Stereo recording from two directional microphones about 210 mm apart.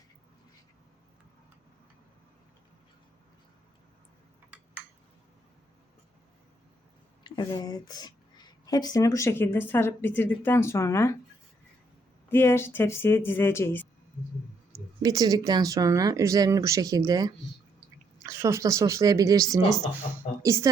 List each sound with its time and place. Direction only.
7.3 s a woman's voice: 20° left (ahead or behind)
12.3 s a woman's voice: 10° left (ahead or behind)
15.0 s speech: 15° right (ahead or behind)